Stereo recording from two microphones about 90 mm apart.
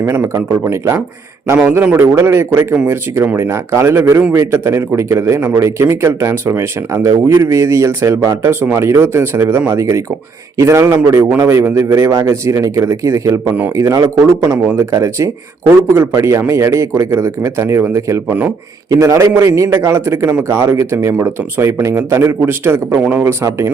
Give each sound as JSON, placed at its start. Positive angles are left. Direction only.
{"t": 0.3, "sound": "speech", "side_deg": -30}
{"t": 1.8, "sound": "a man's voice", "side_deg": -20}
{"t": 23.0, "sound": "speech", "side_deg": -15}
{"t": 23.2, "sound": "speech", "side_deg": -35}